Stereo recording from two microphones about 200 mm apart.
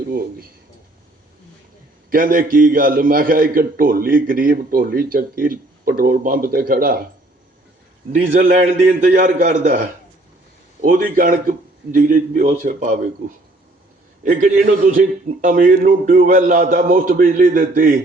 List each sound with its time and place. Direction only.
0.1 s a man's voice: 45° right (ahead or behind)
2.0 s a man's voice: 45° right (ahead or behind)
8.1 s a man's voice: 45° right (ahead or behind)
14.3 s a man's voice: 40° right (ahead or behind)